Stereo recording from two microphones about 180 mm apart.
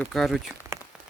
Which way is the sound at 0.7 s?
15° right (ahead or behind).